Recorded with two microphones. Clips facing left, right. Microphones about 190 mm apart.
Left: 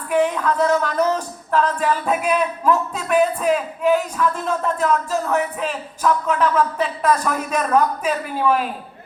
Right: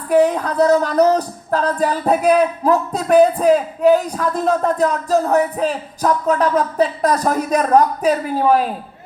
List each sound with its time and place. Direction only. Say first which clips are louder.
0.1 s music: right 4 dB; 40° right (ahead or behind)